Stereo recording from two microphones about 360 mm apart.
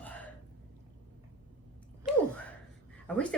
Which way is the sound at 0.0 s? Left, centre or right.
Centre.